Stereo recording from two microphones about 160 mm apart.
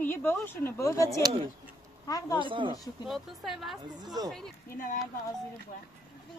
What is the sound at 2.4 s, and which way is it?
Speech, 30° right (ahead or behind).